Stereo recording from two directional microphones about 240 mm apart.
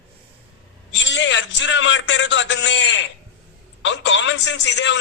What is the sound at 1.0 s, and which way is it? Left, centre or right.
A man's voice, left.